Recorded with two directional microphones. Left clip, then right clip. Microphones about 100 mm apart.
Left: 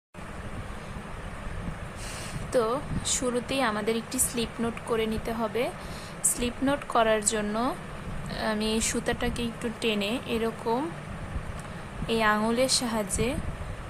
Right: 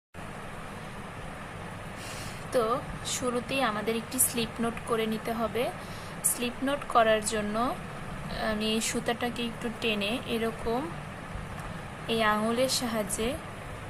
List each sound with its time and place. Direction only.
2.5 s speech: 30° left (ahead or behind)
4.4 s speech: 20° left (ahead or behind)
12.0 s speech: 35° left (ahead or behind)